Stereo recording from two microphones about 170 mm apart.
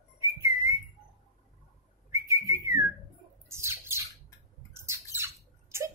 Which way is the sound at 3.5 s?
15° right (ahead or behind).